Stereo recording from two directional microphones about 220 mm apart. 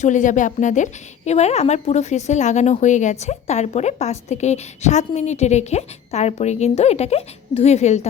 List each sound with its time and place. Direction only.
0.0 s a woman's voice: 35° left (ahead or behind)